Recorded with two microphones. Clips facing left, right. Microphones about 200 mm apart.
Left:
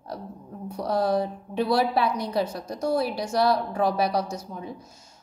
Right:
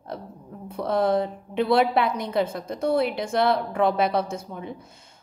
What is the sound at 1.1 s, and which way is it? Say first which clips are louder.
A woman's voice: right 1 dB; 55° right (ahead or behind).